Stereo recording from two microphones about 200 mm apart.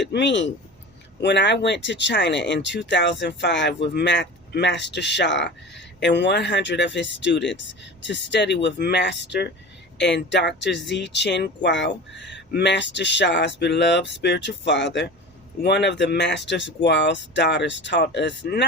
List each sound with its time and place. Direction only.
0.0 s speech: 60° left (ahead or behind)